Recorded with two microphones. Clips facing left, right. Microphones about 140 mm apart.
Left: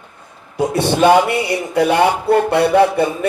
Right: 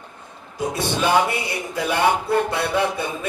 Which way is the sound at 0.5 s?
65° left (ahead or behind).